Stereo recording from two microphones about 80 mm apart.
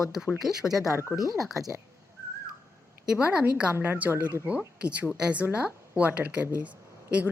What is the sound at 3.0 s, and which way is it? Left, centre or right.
A woman's voice, centre.